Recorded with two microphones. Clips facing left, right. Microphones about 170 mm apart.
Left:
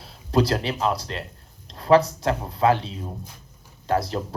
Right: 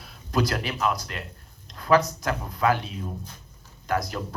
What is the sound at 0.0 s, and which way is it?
Speech, 30° left (ahead or behind).